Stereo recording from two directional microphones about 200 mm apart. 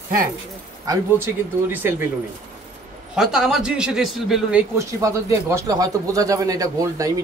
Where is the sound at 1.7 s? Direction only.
10° right (ahead or behind).